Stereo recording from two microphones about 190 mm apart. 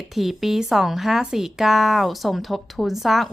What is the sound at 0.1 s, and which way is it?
A woman's voice, centre (ahead or behind).